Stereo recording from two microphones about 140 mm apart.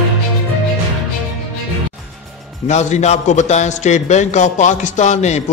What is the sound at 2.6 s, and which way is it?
A man's voice, 55° left (ahead or behind).